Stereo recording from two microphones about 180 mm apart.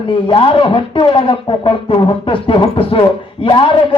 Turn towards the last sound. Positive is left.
turn(degrees=25)  # may be behind; listen again after turning